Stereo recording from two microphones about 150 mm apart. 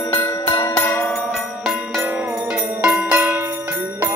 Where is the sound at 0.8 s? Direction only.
20° left (ahead or behind).